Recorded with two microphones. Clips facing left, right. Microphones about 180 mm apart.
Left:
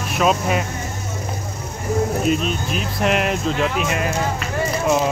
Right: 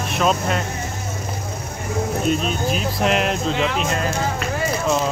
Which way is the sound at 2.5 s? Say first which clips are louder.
Right 2 dB; centre (ahead or behind).